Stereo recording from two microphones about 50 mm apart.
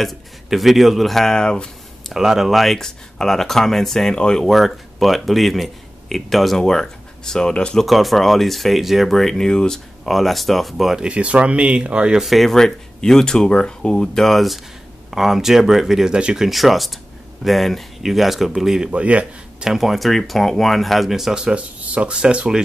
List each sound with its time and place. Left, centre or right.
0.0 s speech: centre
2.1 s speech: centre
4.1 s speech: centre
4.5 s speech: centre
7.8 s speech: centre
10.0 s speech: centre
11.0 s speech: right
12.2 s speech: centre
12.5 s speech: centre
16.1 s speech: right
16.3 s speech: centre
18.9 s speech: right
19.6 s speech: centre
21.5 s speech: right